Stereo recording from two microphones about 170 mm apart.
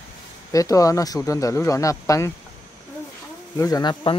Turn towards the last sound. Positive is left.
turn(degrees=25)  # may be behind; listen again after turning